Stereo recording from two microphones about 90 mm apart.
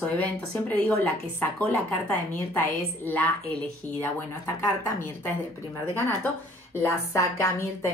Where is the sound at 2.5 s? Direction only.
20° left (ahead or behind).